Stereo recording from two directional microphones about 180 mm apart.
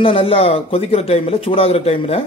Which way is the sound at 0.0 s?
30° left (ahead or behind).